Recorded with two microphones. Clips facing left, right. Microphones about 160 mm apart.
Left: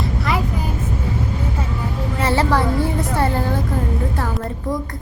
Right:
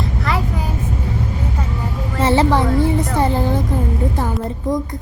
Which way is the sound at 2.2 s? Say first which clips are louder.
Right 3 dB; 20° right (ahead or behind).